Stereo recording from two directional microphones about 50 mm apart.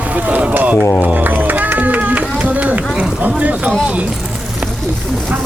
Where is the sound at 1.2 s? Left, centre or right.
Right.